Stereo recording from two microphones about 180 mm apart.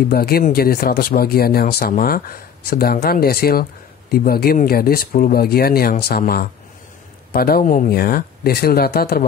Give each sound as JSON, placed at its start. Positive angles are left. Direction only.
{"t": 0.1, "sound": "speech", "side_deg": 55}